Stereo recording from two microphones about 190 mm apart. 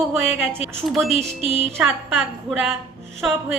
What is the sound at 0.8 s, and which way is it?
A woman's voice, centre (ahead or behind).